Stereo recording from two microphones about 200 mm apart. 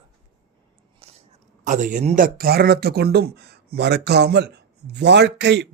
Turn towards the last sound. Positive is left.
turn(degrees=-60)  # may be behind; listen again after turning